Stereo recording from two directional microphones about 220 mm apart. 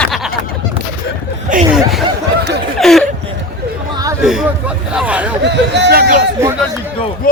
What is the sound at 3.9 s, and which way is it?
Chatter, 15° right (ahead or behind).